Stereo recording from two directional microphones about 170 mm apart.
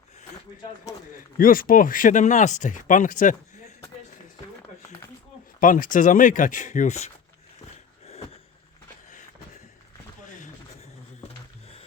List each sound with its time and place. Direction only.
1.4 s speech: 55° left (ahead or behind)
5.5 s speech: 50° left (ahead or behind)
10.2 s a sound: 45° left (ahead or behind)